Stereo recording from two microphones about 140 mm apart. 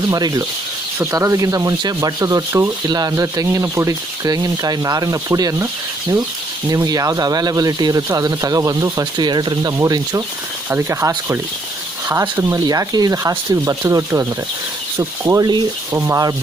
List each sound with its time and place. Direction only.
0.1 s speech: 25° right (ahead or behind)
6.7 s speech: 25° right (ahead or behind)
12.4 s speech: 25° right (ahead or behind)